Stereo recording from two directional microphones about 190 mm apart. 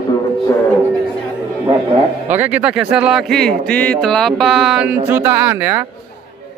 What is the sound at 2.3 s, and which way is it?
A man's voice, 10° right (ahead or behind).